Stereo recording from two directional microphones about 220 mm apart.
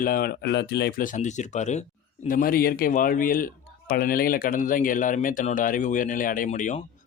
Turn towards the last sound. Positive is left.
turn(degrees=35)  # may be behind; listen again after turning